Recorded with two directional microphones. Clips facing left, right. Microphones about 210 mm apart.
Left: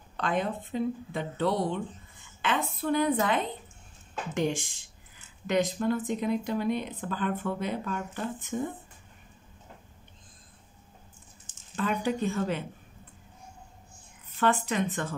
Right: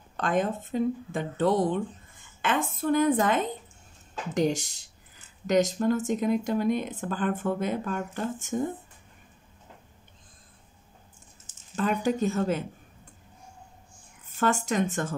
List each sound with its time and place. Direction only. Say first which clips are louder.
0.2 s speech: right 3 dB; 45° right (ahead or behind)
11.7 s speech: right 3 dB; 45° right (ahead or behind)
14.4 s speech: right 1 dB; 45° right (ahead or behind)